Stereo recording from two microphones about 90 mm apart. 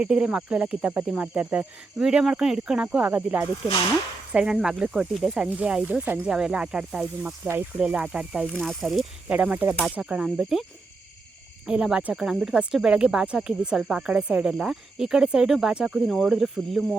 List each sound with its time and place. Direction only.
0.0 s speech: 10° right (ahead or behind)
8.5 s speech: centre (ahead or behind)
9.3 s speech: 15° right (ahead or behind)